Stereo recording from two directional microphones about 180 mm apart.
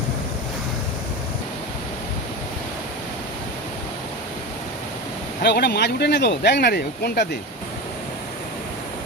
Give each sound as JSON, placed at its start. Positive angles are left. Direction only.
{"t": 5.4, "sound": "speech", "side_deg": 65}